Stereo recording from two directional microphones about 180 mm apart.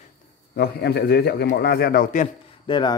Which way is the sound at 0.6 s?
65° left (ahead or behind).